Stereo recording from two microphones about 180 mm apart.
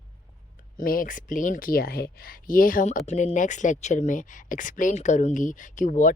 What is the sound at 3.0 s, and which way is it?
Speech, 35° left (ahead or behind).